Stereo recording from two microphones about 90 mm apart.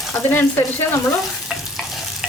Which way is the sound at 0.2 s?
25° left (ahead or behind).